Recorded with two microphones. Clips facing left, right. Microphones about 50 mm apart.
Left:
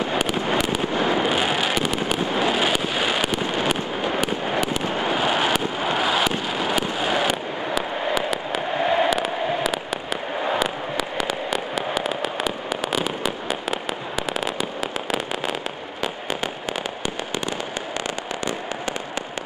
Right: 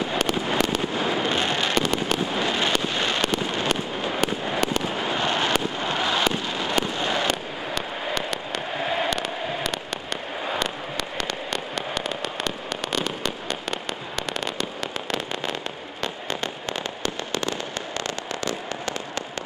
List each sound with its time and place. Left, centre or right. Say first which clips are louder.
0.0 s fireworks: left 2 dB; centre
17.0 s fireworks: even; centre